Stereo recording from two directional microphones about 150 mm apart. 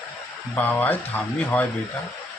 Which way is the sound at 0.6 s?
10° left (ahead or behind).